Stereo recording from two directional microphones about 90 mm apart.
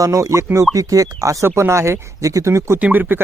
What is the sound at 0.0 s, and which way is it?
Speech, 35° right (ahead or behind).